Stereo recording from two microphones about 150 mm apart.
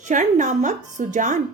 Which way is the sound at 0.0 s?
55° right (ahead or behind).